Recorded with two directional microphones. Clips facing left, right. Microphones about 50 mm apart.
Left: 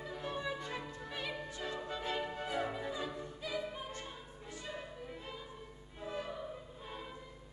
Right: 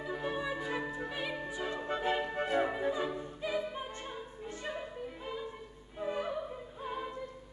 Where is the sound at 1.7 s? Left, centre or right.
Right.